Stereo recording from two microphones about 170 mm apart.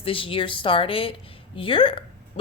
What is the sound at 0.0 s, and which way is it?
A woman's voice, 30° left (ahead or behind).